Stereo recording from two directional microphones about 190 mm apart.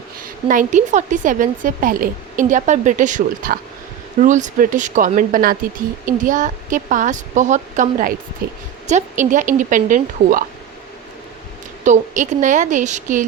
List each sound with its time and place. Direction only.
0.4 s a woman's voice: 40° right (ahead or behind)
8.9 s a woman's voice: 40° right (ahead or behind)
11.9 s a woman's voice: 40° right (ahead or behind)